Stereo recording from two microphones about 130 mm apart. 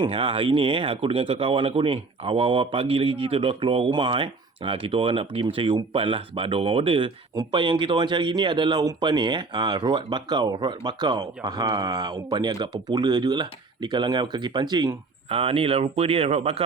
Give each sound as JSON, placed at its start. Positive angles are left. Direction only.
{"t": 0.0, "sound": "speech", "side_deg": -45}